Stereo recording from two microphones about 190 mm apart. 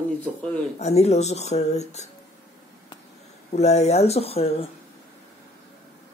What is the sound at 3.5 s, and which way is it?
Speech, 35° left (ahead or behind).